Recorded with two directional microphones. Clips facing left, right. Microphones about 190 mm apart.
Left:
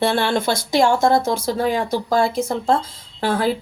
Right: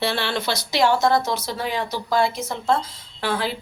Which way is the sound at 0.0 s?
50° left (ahead or behind).